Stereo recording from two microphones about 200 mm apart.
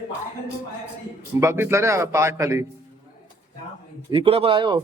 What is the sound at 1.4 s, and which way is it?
A man's voice, 15° right (ahead or behind).